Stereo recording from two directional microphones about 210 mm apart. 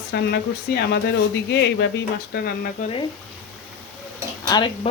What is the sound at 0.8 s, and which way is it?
Speech, 50° left (ahead or behind).